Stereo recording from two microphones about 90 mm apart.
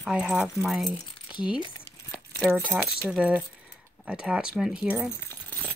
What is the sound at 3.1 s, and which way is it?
Speech, 15° right (ahead or behind).